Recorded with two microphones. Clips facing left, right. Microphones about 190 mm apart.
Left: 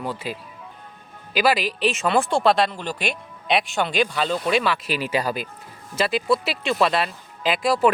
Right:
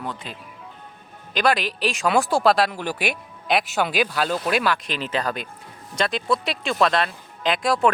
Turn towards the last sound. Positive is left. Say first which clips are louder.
# left 1 dB
turn(degrees=0)  # may be behind; listen again after turning